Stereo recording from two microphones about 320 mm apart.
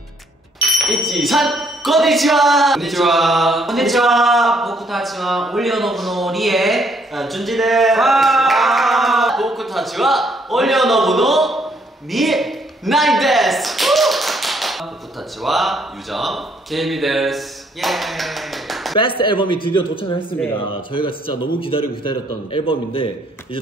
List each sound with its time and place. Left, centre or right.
0.6 s speech: centre
18.9 s a man's voice: centre